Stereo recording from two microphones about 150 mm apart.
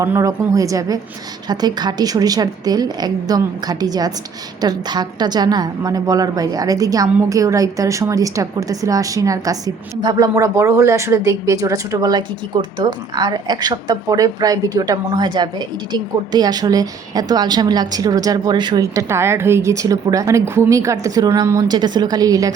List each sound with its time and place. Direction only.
0.0 s a woman's voice: 20° right (ahead or behind)